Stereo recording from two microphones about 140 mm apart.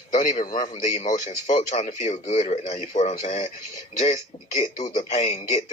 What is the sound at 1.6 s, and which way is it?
Speech, 50° left (ahead or behind).